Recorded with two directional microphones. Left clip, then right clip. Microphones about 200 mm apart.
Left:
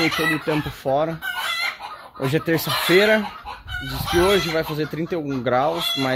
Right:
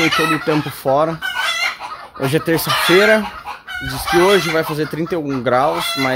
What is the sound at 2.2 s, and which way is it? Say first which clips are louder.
Chicken: right 4 dB; 10° right (ahead or behind).